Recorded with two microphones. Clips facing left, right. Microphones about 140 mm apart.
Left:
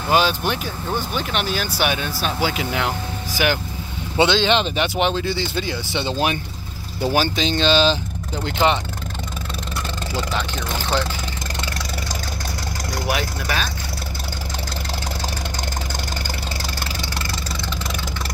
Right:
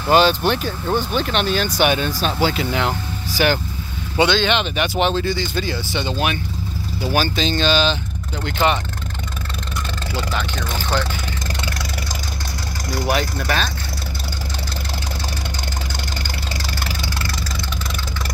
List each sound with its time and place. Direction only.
0.1 s speech: 10° left (ahead or behind)
4.2 s speech: 25° left (ahead or behind)
4.9 s speech: 15° left (ahead or behind)
5.3 s speech: 30° left (ahead or behind)
13.1 s speech: 10° left (ahead or behind)